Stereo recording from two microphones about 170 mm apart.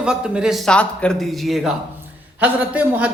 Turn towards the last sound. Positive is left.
turn(degrees=-10)  # may be behind; listen again after turning